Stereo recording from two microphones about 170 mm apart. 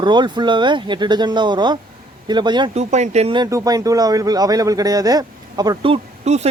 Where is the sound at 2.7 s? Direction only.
40° right (ahead or behind).